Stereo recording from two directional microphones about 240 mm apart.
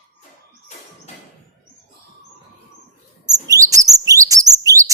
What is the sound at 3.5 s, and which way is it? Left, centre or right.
Chirp, centre.